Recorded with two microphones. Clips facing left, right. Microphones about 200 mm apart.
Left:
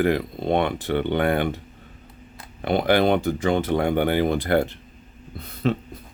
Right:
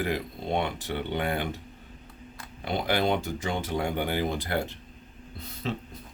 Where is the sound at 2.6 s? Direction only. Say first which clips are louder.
Left 8 dB; 60° left (ahead or behind).